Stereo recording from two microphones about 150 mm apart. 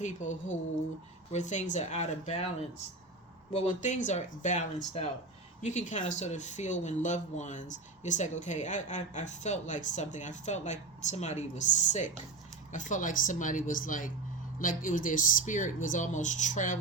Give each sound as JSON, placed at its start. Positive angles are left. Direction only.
{"t": 0.0, "sound": "speech", "side_deg": 55}
{"t": 3.5, "sound": "speech", "side_deg": 50}